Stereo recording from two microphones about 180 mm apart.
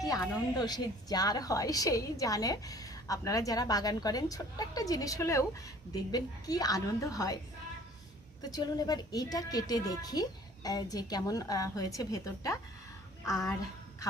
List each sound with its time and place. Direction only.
0.0 s a woman's voice: 20° left (ahead or behind)
8.4 s a woman's voice: 20° left (ahead or behind)